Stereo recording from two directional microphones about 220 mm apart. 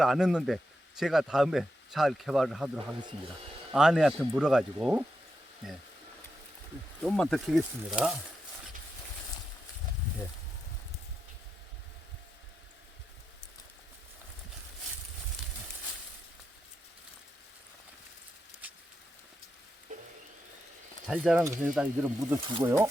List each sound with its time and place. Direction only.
0.0 s speech: centre (ahead or behind)
3.7 s speech: 5° right (ahead or behind)
7.0 s speech: centre (ahead or behind)
19.9 s a sound: 35° right (ahead or behind)
21.1 s speech: 5° right (ahead or behind)